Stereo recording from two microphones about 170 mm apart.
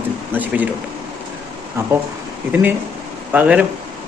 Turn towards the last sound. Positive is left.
turn(degrees=-10)  # may be behind; listen again after turning